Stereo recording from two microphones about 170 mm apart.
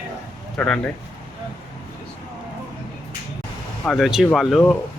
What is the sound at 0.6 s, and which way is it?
Speech, 5° left (ahead or behind).